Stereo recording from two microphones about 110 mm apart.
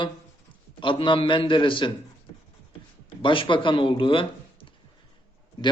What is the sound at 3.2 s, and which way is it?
Speech, 50° left (ahead or behind).